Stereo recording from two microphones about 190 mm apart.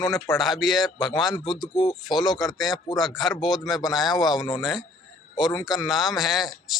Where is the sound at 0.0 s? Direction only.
Centre (ahead or behind).